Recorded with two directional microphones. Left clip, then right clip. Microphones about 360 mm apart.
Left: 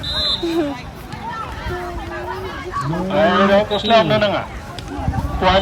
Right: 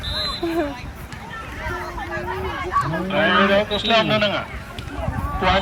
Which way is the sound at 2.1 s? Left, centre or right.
Right.